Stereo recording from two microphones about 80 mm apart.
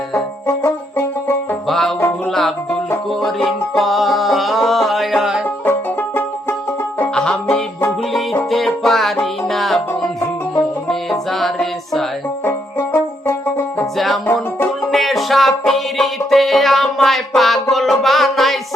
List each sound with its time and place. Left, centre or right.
0.1 s music: left
1.6 s music: centre
3.2 s music: centre
5.6 s music: left
7.1 s music: centre
8.4 s music: centre
10.8 s music: centre
12.5 s music: left
14.9 s music: centre